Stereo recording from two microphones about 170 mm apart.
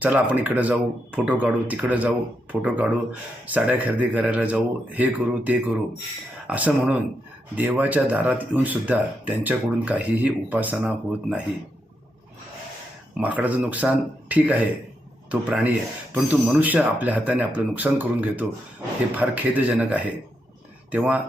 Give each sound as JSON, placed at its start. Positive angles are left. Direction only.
{"t": 0.0, "sound": "speech", "side_deg": -10}
{"t": 13.1, "sound": "speech", "side_deg": -10}